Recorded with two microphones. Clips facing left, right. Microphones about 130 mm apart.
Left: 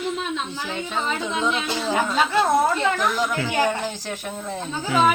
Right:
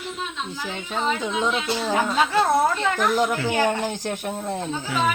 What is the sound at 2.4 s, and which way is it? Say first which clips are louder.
Speech: left 2 dB; 5° left (ahead or behind).